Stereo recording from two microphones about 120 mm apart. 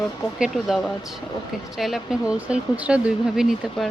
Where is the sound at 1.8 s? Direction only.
Centre (ahead or behind).